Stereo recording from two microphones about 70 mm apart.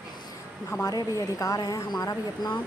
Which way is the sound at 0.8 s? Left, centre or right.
Left.